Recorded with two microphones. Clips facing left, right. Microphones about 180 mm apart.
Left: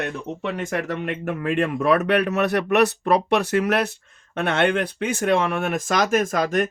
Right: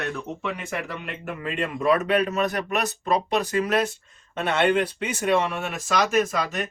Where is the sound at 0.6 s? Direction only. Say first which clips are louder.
Left 6 dB; 45° left (ahead or behind); by 3.9 s 65° left (ahead or behind).